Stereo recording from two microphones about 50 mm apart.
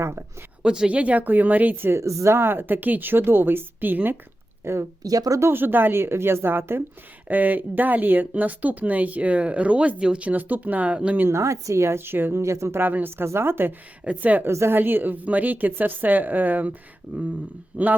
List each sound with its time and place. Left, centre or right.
0.0 s a woman's voice: right
0.6 s a woman's voice: centre
0.9 s a woman's voice: right
1.7 s speech: right
2.0 s speech: right
4.6 s a woman's voice: right
5.4 s speech: right
7.3 s a woman's voice: right
10.2 s a woman's voice: right
11.3 s a woman's voice: right
12.4 s a woman's voice: right
12.8 s speech: right
13.2 s speech: right
14.2 s a woman's voice: right